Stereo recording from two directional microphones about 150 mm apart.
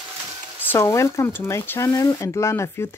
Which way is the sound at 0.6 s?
15° left (ahead or behind).